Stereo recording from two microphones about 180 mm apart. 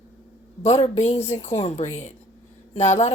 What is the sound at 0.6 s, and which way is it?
Speech, 40° left (ahead or behind).